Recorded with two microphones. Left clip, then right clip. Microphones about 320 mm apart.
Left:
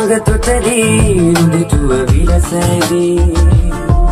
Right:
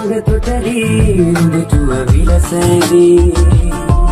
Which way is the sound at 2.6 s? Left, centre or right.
Centre.